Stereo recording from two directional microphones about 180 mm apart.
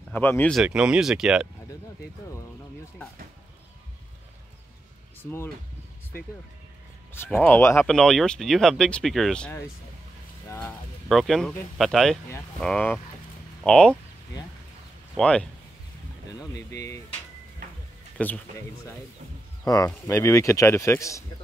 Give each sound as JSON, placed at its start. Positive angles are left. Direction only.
{"t": 0.1, "sound": "speech", "side_deg": 10}
{"t": 0.6, "sound": "speech", "side_deg": -5}
{"t": 7.2, "sound": "speech", "side_deg": 10}
{"t": 11.1, "sound": "speech", "side_deg": 0}
{"t": 15.1, "sound": "speech", "side_deg": 5}
{"t": 16.3, "sound": "speech", "side_deg": 20}
{"t": 18.1, "sound": "speech", "side_deg": 10}
{"t": 19.6, "sound": "speech", "side_deg": 20}